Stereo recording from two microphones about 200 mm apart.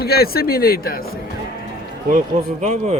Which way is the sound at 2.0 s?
40° right (ahead or behind).